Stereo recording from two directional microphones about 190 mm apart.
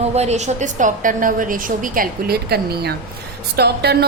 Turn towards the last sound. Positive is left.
turn(degrees=-60)  # may be behind; listen again after turning